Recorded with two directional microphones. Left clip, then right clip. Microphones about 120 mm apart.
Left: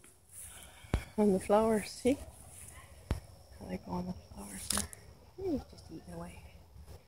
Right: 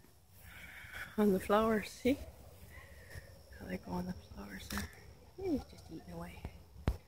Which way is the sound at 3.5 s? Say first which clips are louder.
Left 1 dB; 10° left (ahead or behind).